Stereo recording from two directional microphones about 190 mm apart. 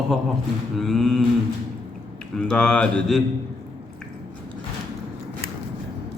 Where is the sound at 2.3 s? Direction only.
5° left (ahead or behind).